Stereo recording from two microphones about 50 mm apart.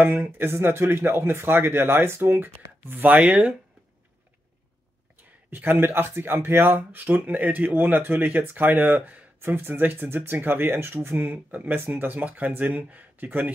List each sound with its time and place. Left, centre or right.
0.2 s speech: right
3.2 s speech: right
5.5 s speech: right
9.4 s speech: right
11.1 s speech: right
11.9 s speech: right